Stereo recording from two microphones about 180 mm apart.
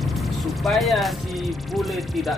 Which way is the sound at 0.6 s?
Centre (ahead or behind).